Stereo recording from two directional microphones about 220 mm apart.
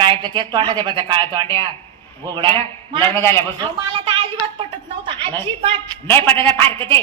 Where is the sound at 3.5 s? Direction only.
20° right (ahead or behind).